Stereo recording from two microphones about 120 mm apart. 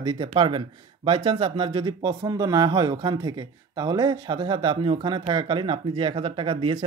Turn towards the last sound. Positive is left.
turn(degrees=-45)  # may be behind; listen again after turning